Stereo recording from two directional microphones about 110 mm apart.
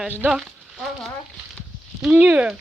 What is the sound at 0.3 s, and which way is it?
Speech, 5° right (ahead or behind).